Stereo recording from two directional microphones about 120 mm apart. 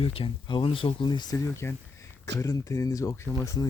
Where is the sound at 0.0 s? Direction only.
50° left (ahead or behind).